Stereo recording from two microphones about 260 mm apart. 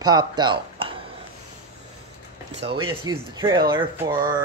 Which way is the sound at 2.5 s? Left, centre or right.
Centre.